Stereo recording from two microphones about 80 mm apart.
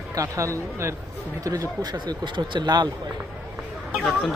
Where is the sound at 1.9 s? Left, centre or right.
Right.